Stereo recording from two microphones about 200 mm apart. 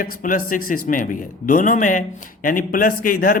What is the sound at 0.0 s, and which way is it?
Speech, 45° left (ahead or behind).